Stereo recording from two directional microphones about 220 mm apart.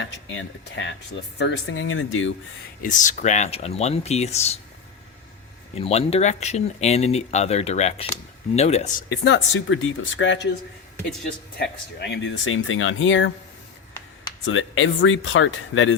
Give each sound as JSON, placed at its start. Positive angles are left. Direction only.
{"t": 0.0, "sound": "speech", "side_deg": 60}
{"t": 2.8, "sound": "speech", "side_deg": 35}
{"t": 5.8, "sound": "speech", "side_deg": 25}
{"t": 9.0, "sound": "speech", "side_deg": 55}
{"t": 11.5, "sound": "speech", "side_deg": 50}
{"t": 14.4, "sound": "speech", "side_deg": 65}